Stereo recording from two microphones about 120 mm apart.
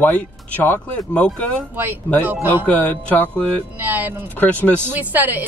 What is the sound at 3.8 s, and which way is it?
Speech, 15° right (ahead or behind).